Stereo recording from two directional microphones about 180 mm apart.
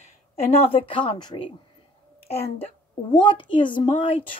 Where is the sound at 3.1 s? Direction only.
25° left (ahead or behind).